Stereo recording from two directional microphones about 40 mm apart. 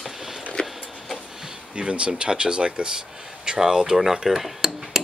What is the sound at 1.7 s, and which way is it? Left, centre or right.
Speech, right.